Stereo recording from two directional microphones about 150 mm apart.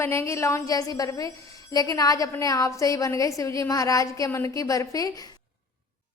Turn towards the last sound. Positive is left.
turn(degrees=25)  # may be behind; listen again after turning